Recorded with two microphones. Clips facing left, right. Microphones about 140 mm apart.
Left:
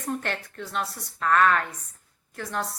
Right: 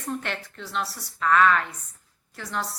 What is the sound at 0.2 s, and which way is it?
A woman's voice, 50° left (ahead or behind).